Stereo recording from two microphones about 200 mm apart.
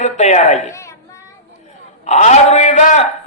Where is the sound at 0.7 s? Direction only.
15° left (ahead or behind).